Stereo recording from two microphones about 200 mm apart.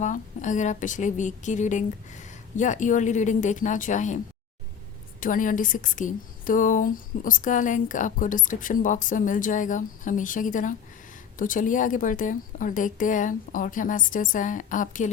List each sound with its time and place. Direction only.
0.0 s a woman's voice: 40° left (ahead or behind)
5.2 s a woman's voice: 40° left (ahead or behind)